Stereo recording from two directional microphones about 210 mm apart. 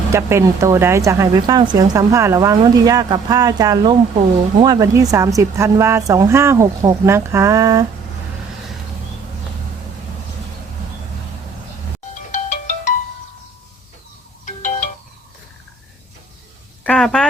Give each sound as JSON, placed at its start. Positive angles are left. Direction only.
{"t": 0.1, "sound": "a woman's voice", "side_deg": -10}
{"t": 12.1, "sound": "ringtone", "side_deg": 35}
{"t": 14.4, "sound": "ringtone", "side_deg": 40}
{"t": 16.8, "sound": "a sound", "side_deg": 5}